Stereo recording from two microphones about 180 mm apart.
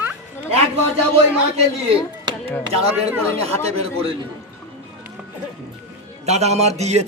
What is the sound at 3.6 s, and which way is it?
Speech, 30° right (ahead or behind).